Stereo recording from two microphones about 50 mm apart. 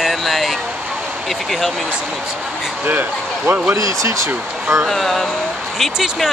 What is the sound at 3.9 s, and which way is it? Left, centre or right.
Speech, right.